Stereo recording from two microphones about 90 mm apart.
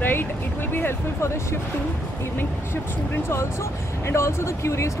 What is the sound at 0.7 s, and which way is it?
Speech, 25° left (ahead or behind).